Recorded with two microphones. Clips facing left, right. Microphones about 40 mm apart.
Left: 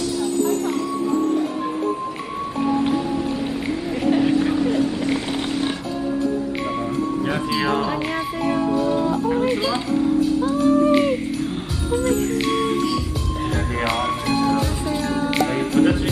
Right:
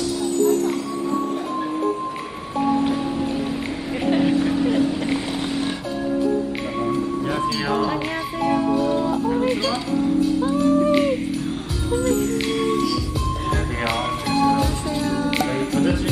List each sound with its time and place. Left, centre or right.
4.1 s a sound: centre
7.2 s music: centre
8.0 s music: centre
10.8 s a sound: centre
11.9 s music: centre
13.5 s music: centre
15.0 s music: centre